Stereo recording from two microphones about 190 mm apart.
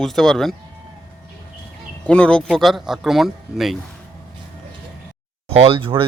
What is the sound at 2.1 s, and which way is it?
Speech, 5° left (ahead or behind).